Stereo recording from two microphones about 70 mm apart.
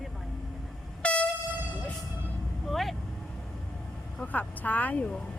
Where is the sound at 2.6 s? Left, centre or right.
Centre.